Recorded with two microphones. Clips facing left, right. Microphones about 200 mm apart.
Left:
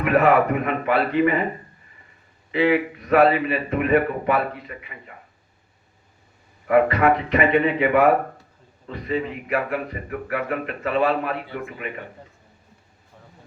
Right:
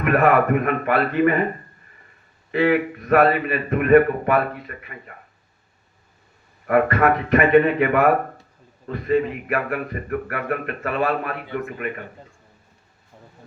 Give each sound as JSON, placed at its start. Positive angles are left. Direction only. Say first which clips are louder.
{"t": 0.0, "sound": "a man's voice", "louder": "even", "side_deg": -50}
{"t": 2.5, "sound": "a man's voice", "louder": "right 1 dB", "side_deg": -50}
{"t": 6.7, "sound": "a man's voice", "louder": "even", "side_deg": -50}